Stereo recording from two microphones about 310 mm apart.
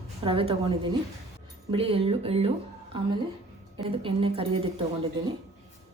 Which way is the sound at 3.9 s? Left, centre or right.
Centre.